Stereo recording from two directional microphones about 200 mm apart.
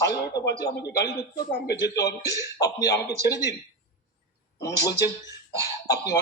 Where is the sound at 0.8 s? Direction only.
55° left (ahead or behind).